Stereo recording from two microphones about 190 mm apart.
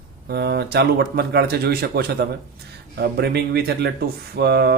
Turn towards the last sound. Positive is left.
turn(degrees=-60)  # may be behind; listen again after turning